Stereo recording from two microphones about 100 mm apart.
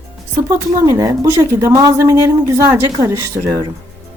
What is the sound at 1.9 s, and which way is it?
Speech, 30° right (ahead or behind).